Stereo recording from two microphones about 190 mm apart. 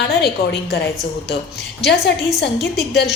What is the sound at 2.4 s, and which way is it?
Speech, 60° left (ahead or behind).